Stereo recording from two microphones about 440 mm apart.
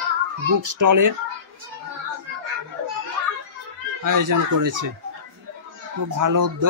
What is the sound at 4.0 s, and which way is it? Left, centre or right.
Speech, right.